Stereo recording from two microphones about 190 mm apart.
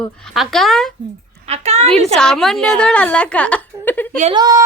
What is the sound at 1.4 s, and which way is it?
Speech, 35° right (ahead or behind).